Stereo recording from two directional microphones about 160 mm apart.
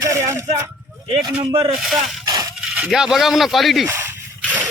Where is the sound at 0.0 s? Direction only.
20° right (ahead or behind).